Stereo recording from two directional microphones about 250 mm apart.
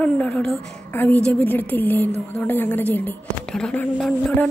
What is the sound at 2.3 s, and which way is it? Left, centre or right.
A woman's voice, centre.